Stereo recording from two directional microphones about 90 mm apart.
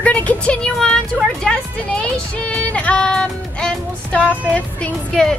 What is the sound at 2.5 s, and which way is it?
Music, 15° left (ahead or behind).